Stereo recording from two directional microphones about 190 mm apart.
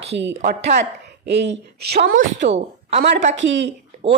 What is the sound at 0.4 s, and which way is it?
Speech, 45° right (ahead or behind).